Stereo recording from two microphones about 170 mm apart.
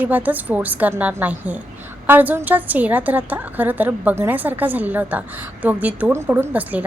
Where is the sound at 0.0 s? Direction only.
10° right (ahead or behind).